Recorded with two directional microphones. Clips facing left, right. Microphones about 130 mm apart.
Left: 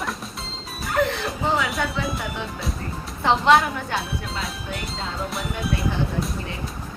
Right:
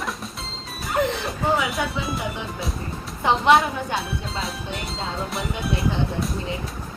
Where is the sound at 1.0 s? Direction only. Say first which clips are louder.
Even; 20° right (ahead or behind).